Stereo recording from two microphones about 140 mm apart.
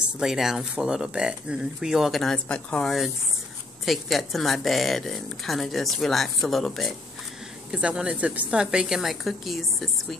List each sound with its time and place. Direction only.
0.2 s speech: 5° right (ahead or behind)